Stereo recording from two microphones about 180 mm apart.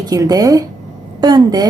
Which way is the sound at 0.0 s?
20° right (ahead or behind).